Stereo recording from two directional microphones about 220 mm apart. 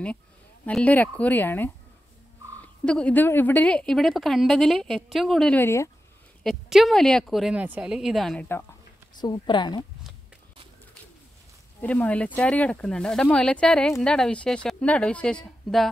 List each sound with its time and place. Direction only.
0.7 s speech: 5° left (ahead or behind)
6.4 s speech: centre (ahead or behind)
9.2 s a woman's voice: 20° left (ahead or behind)
11.8 s speech: 5° left (ahead or behind)